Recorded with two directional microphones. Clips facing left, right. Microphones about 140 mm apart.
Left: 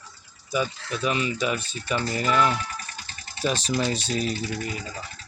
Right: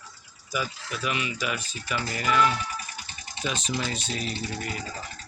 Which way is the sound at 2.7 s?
15° right (ahead or behind).